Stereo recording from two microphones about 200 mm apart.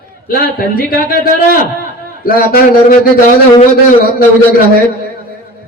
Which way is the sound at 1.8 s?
50° left (ahead or behind).